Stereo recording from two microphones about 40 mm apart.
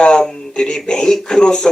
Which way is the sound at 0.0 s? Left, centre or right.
Left.